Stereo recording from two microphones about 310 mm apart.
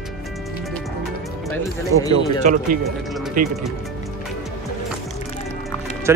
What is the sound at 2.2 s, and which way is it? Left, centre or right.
Speech, right.